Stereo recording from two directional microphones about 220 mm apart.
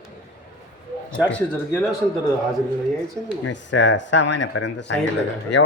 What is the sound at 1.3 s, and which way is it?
Speech, 5° left (ahead or behind).